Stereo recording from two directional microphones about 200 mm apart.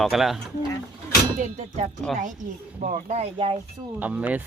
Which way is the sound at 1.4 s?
35° right (ahead or behind).